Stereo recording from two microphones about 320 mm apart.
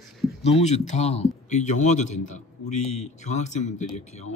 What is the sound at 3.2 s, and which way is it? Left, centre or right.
Speech, left.